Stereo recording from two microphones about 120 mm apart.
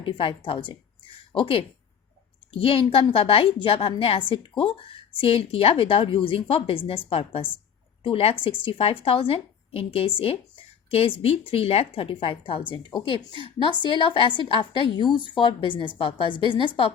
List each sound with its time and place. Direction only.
0.0 s a woman's voice: 45° left (ahead or behind)